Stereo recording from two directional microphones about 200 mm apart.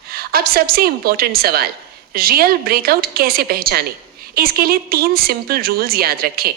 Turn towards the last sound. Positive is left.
turn(degrees=-50)  # may be behind; listen again after turning